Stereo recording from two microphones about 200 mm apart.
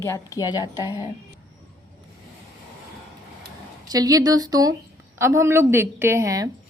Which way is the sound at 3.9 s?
20° right (ahead or behind).